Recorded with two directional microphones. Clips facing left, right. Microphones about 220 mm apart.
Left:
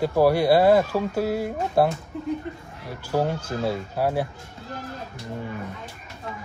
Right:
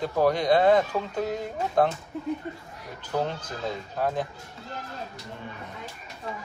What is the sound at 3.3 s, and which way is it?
Speech, 10° left (ahead or behind).